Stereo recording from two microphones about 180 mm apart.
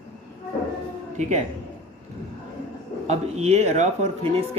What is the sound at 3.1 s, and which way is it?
Speech, 35° right (ahead or behind).